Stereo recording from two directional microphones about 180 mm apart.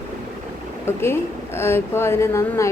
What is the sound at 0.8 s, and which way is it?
A woman's voice, 15° left (ahead or behind).